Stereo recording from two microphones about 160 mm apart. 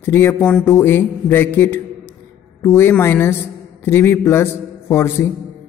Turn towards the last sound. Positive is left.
turn(degrees=15)  # may be behind; listen again after turning